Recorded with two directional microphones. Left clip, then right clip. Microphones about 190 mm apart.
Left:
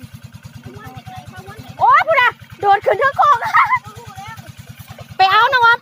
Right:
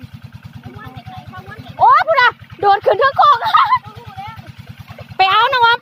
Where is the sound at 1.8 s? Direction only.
25° right (ahead or behind).